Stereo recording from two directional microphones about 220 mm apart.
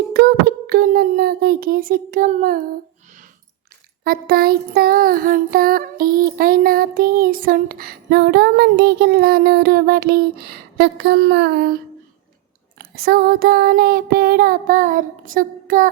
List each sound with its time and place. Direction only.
0.1 s a sound: 45° right (ahead or behind)
4.0 s child singing: 45° right (ahead or behind)
12.8 s child singing: 45° right (ahead or behind)